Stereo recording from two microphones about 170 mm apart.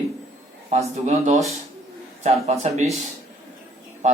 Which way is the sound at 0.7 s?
40° right (ahead or behind).